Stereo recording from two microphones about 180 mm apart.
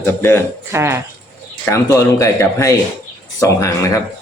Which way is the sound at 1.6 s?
15° left (ahead or behind).